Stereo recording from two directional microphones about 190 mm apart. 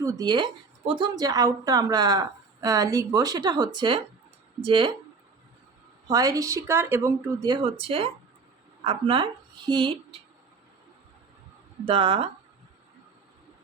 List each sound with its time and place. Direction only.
0.0 s speech: 15° right (ahead or behind)
6.1 s a woman's voice: 20° right (ahead or behind)
11.9 s speech: 30° right (ahead or behind)